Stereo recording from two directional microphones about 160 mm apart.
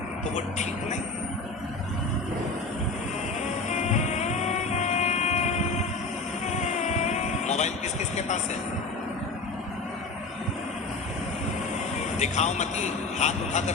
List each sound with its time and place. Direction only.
0.3 s a man's voice: 45° left (ahead or behind)
3.7 s music: 45° left (ahead or behind)
6.5 s vehicle: 45° left (ahead or behind)
12.2 s a man's voice: 45° left (ahead or behind)